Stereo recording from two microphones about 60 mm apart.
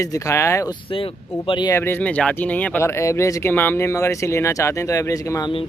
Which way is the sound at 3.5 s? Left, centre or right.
Left.